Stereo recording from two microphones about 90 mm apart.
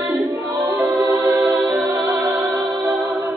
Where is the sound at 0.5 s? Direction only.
45° right (ahead or behind).